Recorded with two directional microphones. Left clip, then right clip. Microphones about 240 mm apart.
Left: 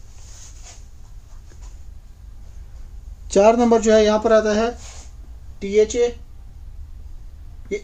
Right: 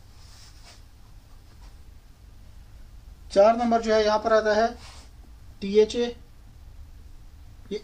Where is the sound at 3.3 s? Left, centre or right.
Left.